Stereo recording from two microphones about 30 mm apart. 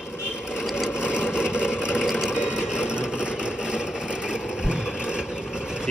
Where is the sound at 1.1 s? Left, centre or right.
Right.